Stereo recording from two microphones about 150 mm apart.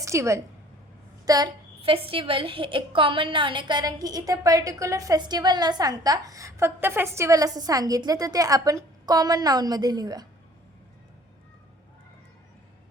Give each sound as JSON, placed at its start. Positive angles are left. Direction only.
{"t": 0.0, "sound": "a woman's voice", "side_deg": -20}
{"t": 1.8, "sound": "a woman's voice", "side_deg": -35}